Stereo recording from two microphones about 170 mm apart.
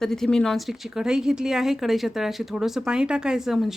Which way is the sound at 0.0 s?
Centre (ahead or behind).